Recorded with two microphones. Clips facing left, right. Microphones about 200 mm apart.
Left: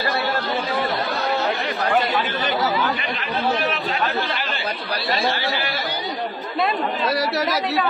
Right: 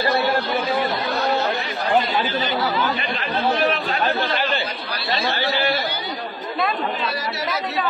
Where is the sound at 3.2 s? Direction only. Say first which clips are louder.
Right 3 dB; 35° right (ahead or behind).